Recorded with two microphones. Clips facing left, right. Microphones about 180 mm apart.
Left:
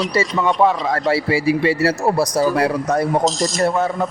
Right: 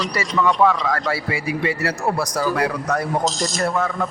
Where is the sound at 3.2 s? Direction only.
Centre (ahead or behind).